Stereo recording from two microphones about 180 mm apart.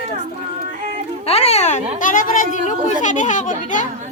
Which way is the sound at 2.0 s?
45° left (ahead or behind).